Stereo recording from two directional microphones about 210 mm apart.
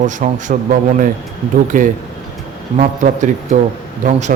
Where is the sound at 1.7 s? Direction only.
40° right (ahead or behind).